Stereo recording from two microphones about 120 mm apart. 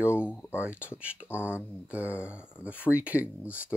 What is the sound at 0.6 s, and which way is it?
Speech, 10° right (ahead or behind).